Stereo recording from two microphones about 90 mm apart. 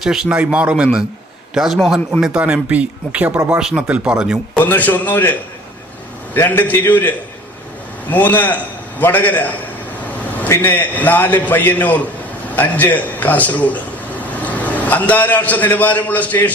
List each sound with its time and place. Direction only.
0.0 s a man's voice: 5° right (ahead or behind)
4.5 s a man's voice: 20° left (ahead or behind)
6.3 s a man's voice: 25° left (ahead or behind)
8.1 s a man's voice: 20° left (ahead or behind)